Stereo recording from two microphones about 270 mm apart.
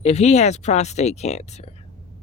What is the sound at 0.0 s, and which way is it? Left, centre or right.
Speech, left.